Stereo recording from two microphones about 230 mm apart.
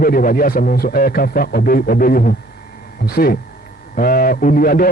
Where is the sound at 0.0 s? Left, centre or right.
Left.